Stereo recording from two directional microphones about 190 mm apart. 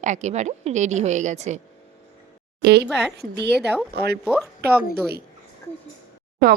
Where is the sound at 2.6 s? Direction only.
60° right (ahead or behind).